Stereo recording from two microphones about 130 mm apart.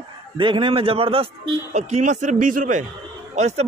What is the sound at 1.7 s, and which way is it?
A man's voice, 65° right (ahead or behind).